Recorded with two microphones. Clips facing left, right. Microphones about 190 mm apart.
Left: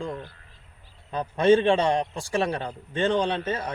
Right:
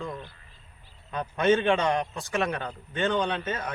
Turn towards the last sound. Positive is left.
turn(degrees=30)  # may be behind; listen again after turning